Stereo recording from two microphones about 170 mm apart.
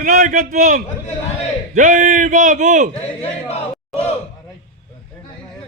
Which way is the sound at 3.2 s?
35° left (ahead or behind).